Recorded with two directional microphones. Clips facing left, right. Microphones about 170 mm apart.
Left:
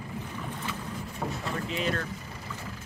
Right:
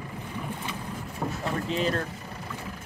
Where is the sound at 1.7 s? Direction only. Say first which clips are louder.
Right 3 dB; 35° right (ahead or behind).